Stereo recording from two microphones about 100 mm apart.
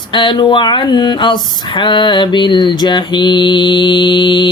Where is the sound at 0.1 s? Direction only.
55° left (ahead or behind).